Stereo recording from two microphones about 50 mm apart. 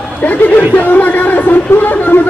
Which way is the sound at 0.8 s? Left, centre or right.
Left.